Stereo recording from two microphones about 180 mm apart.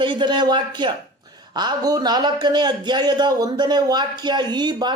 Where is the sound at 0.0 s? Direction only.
25° right (ahead or behind).